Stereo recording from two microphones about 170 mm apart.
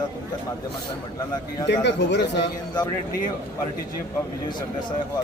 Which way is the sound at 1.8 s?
90° left.